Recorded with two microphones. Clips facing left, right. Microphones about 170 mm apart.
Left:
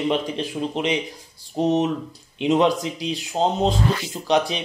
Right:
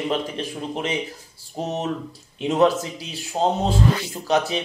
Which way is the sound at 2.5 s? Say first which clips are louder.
Right 2 dB; 5° right (ahead or behind).